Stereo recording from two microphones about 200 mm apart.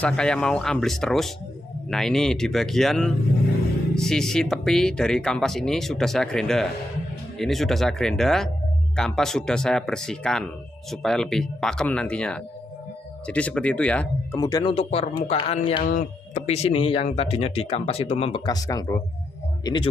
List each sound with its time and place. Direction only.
0.0 s speech: 5° left (ahead or behind)
14.4 s speech: 20° left (ahead or behind)
15.8 s speech: 40° left (ahead or behind); by 19.9 s 25° left (ahead or behind)